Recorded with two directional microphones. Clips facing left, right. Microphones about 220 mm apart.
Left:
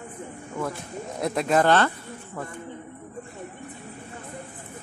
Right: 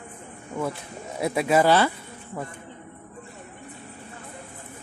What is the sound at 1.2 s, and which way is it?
Speech, 5° right (ahead or behind).